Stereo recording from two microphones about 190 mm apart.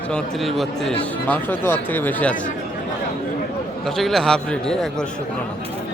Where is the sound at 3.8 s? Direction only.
Centre (ahead or behind).